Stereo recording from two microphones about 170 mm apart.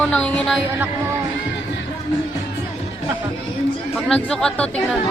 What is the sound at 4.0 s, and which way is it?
Speech, 5° left (ahead or behind).